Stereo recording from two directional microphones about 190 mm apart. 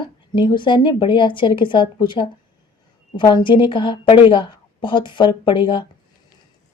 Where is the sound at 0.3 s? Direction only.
25° left (ahead or behind).